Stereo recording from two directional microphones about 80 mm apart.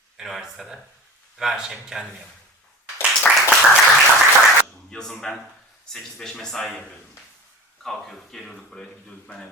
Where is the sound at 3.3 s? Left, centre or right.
Centre.